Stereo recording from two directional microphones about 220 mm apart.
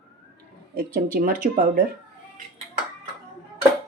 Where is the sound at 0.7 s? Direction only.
40° right (ahead or behind).